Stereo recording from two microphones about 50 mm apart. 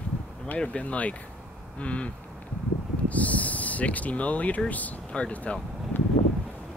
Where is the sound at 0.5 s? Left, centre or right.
Left.